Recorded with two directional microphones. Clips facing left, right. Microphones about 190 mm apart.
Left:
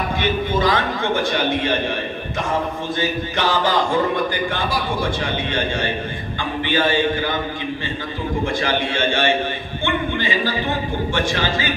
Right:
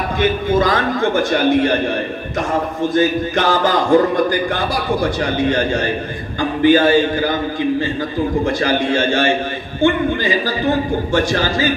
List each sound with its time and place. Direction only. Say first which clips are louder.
0.2 s a man's voice: right 5 dB; 45° right (ahead or behind)
3.0 s a man's voice: right 6 dB; 45° right (ahead or behind)
8.5 s a man's voice: right 5 dB; 40° right (ahead or behind)